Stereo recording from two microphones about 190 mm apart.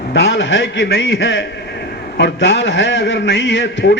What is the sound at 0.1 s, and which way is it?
A man's voice, 65° left (ahead or behind).